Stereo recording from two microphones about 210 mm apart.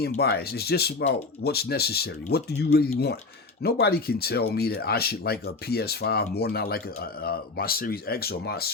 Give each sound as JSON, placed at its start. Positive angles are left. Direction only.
{"t": 0.0, "sound": "speech", "side_deg": 50}